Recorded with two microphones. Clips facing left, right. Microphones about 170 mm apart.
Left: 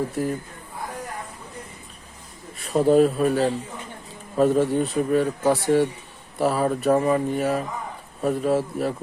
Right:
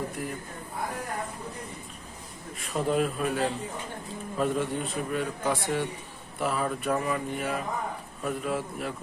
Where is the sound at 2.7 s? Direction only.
40° left (ahead or behind).